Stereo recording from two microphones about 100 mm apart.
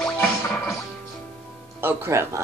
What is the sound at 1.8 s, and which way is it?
Speech, 25° right (ahead or behind).